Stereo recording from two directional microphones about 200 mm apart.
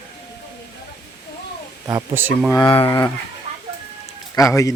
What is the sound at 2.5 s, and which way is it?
Speech, 20° left (ahead or behind).